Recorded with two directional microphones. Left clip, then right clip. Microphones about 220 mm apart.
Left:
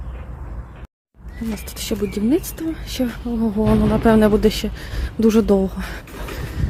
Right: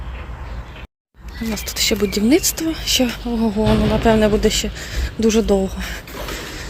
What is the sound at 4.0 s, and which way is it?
Speech, 20° left (ahead or behind).